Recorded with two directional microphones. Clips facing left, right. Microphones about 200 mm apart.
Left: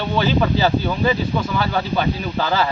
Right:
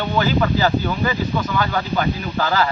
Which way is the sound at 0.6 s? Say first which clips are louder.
Left 1 dB; 25° left (ahead or behind).